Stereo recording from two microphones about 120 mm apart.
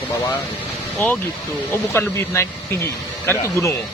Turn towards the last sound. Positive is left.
turn(degrees=25)  # may be behind; listen again after turning